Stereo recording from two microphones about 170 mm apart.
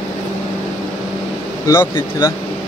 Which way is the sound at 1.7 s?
15° left (ahead or behind).